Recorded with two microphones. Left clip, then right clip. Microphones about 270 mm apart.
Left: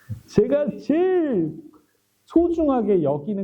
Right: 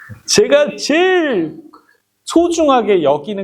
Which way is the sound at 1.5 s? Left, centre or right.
Centre.